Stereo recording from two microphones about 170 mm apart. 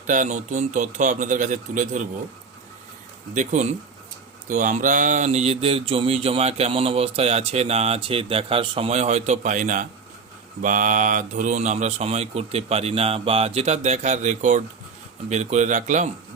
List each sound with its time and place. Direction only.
0.1 s a man's voice: 45° right (ahead or behind)
3.3 s a man's voice: 45° right (ahead or behind)